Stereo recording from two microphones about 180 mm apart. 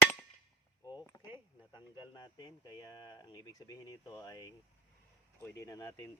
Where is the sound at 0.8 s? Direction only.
20° left (ahead or behind).